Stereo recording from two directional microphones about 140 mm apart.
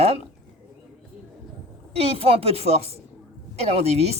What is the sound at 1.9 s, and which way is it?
A woman's voice, 45° right (ahead or behind).